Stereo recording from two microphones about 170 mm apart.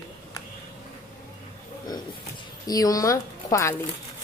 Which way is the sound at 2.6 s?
20° left (ahead or behind).